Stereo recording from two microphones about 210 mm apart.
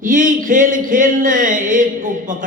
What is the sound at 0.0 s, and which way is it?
Speech, 40° right (ahead or behind).